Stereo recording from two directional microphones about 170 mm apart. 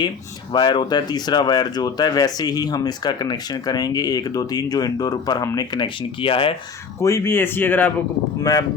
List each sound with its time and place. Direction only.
0.5 s speech: 25° left (ahead or behind)
7.0 s speech: 15° left (ahead or behind)